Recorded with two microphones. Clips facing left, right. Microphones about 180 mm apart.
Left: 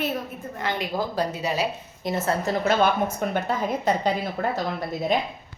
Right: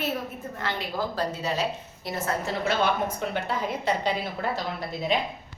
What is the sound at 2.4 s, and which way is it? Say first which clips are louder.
A woman's voice: left 4 dB; 50° left (ahead or behind).